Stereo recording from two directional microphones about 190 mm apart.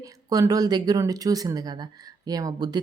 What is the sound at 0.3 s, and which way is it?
Speech, 20° right (ahead or behind).